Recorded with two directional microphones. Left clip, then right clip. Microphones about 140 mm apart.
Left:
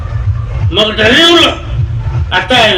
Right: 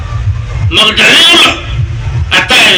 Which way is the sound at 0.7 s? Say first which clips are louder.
Right 4 dB; 30° left (ahead or behind).